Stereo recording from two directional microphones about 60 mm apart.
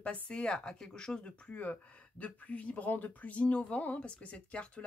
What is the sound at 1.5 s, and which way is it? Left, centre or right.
Speech, left.